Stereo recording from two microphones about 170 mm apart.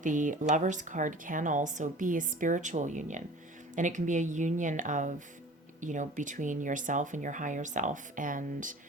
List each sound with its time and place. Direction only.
0.0 s a woman's voice: 50° right (ahead or behind)